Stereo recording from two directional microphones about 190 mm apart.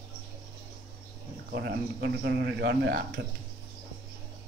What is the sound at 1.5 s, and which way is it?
A man's voice, 55° right (ahead or behind).